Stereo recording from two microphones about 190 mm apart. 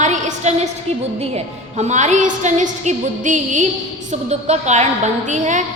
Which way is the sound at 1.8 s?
40° right (ahead or behind).